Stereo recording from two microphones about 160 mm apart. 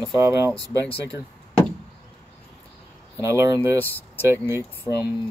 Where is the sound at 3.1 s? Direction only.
20° right (ahead or behind).